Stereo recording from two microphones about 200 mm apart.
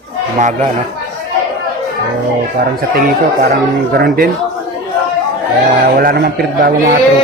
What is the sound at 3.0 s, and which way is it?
Speech, 50° right (ahead or behind).